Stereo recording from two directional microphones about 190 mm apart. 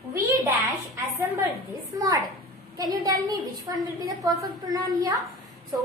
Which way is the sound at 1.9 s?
20° right (ahead or behind).